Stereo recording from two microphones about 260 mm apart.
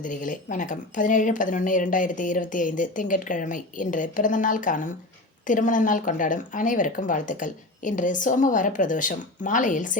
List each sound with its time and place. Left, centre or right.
0.0 s speech: left